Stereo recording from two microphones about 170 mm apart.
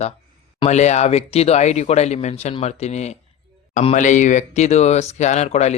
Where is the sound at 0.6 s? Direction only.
40° left (ahead or behind).